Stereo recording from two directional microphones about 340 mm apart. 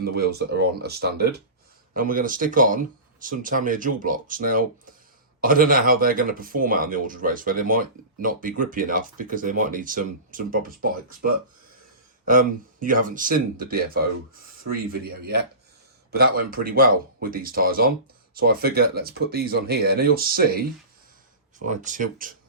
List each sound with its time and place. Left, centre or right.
0.0 s speech: right
12.2 s speech: right